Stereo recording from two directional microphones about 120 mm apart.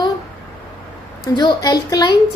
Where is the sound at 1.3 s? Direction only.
35° left (ahead or behind).